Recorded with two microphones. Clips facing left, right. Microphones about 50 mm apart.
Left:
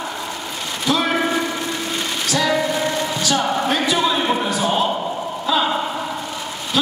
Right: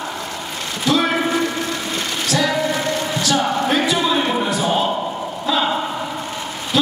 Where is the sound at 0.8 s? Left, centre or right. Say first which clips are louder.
Right 2 dB; centre.